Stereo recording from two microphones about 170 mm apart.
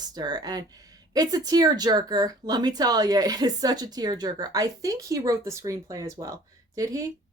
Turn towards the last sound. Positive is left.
turn(degrees=-20)  # may be behind; listen again after turning